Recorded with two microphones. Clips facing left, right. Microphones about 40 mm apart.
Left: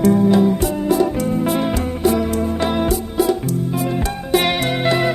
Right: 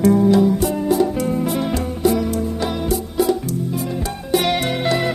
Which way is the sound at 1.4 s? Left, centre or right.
Left.